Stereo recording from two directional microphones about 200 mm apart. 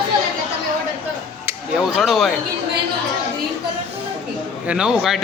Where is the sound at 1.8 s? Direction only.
Centre (ahead or behind).